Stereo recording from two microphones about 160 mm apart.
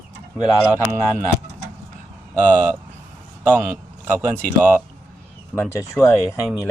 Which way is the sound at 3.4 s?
10° right (ahead or behind).